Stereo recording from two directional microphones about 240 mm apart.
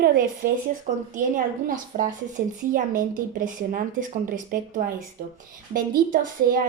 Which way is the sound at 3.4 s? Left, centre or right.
Right.